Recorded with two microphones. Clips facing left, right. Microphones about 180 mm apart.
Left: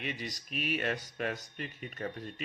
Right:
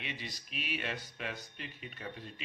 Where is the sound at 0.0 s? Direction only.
45° left (ahead or behind).